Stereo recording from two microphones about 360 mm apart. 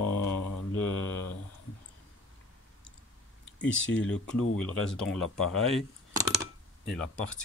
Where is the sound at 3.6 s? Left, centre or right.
Centre.